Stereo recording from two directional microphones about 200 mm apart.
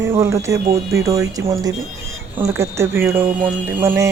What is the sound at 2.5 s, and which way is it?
Speech, 10° right (ahead or behind).